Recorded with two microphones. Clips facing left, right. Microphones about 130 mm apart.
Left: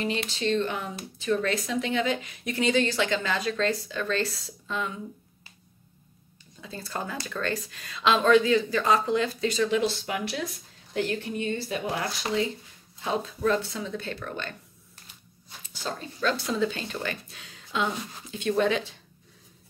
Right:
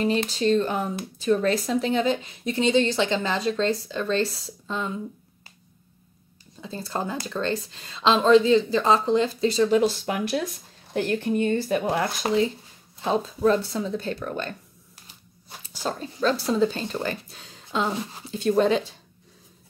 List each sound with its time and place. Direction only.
0.0 s a woman's voice: 40° right (ahead or behind)
6.6 s a woman's voice: 30° right (ahead or behind); by 11.8 s 50° right (ahead or behind)
11.8 s a woman's voice: 30° right (ahead or behind)
15.6 s a woman's voice: 40° right (ahead or behind)